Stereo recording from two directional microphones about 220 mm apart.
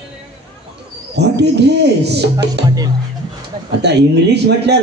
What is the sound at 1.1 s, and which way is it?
A man's voice, 50° right (ahead or behind).